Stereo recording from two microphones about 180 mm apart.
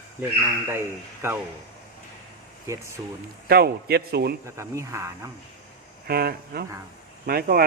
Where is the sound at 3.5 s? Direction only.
60° right (ahead or behind).